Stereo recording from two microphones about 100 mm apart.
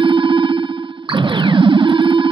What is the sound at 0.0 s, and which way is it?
Cacophony, 55° right (ahead or behind).